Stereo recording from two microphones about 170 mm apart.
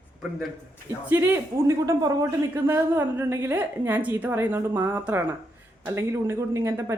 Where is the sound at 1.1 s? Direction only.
10° right (ahead or behind).